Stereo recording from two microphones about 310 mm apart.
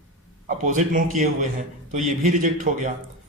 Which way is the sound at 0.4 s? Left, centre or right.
Right.